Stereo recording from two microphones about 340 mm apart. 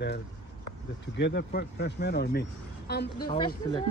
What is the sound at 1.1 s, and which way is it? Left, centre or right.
Speech, left.